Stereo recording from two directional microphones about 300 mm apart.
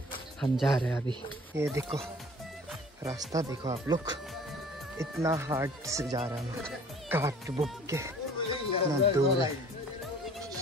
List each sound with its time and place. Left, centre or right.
0.4 s a man's voice: centre
3.0 s speech: centre
7.1 s speech: centre
8.4 s speech: centre